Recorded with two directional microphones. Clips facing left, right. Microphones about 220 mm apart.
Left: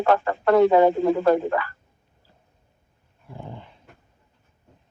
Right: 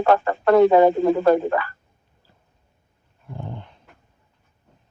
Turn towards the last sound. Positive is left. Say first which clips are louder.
# right 3 dB
turn(degrees=0)  # may be behind; listen again after turning